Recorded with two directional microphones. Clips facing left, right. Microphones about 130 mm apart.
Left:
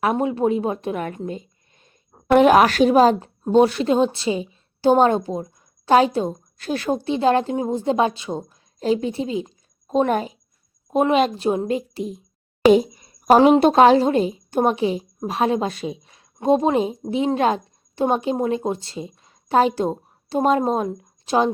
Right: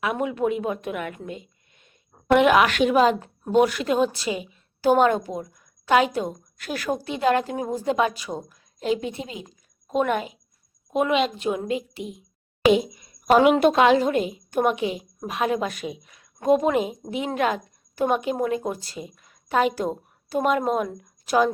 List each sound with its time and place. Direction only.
0.0 s a woman's voice: 35° left (ahead or behind)